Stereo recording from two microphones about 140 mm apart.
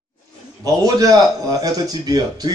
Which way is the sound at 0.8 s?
25° right (ahead or behind).